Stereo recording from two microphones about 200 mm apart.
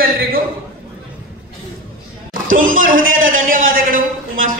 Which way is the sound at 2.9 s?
80° right.